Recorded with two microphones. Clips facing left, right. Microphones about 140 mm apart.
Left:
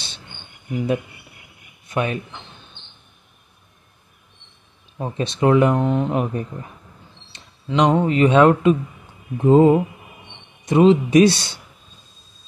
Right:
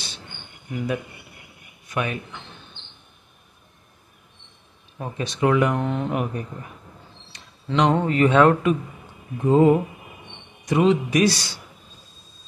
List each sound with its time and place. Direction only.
1.9 s speech: 25° left (ahead or behind)
4.9 s speech: 25° left (ahead or behind)
7.6 s speech: 15° left (ahead or behind)